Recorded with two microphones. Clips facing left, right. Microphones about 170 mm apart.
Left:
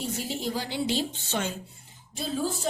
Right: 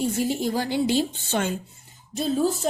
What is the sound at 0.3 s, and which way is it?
Speech, 50° right (ahead or behind).